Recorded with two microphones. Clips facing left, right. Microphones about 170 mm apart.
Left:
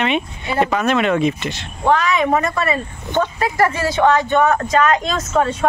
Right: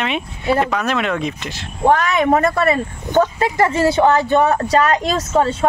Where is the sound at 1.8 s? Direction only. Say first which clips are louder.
Right 2 dB; 50° right (ahead or behind).